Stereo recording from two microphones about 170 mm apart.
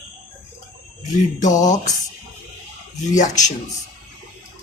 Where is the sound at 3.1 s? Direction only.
45° left (ahead or behind).